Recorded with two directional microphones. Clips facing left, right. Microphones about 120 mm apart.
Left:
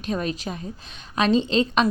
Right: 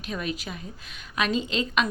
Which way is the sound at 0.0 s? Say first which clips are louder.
Left 5 dB; 35° left (ahead or behind).